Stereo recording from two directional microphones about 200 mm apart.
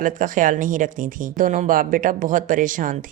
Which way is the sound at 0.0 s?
40° right (ahead or behind).